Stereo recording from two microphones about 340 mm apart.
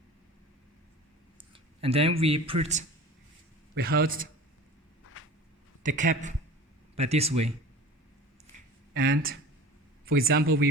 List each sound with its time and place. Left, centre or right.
1.8 s speech: centre
5.8 s speech: right
8.9 s speech: right